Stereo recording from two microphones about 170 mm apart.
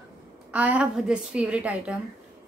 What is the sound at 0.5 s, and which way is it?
Speech, 10° right (ahead or behind).